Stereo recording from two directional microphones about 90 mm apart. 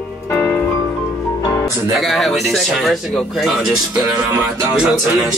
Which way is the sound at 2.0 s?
Centre (ahead or behind).